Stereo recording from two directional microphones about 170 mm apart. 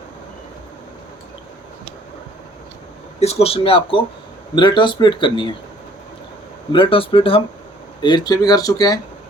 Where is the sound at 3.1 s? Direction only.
35° left (ahead or behind).